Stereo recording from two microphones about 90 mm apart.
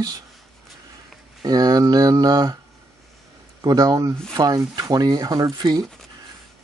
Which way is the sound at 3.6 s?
45° right (ahead or behind).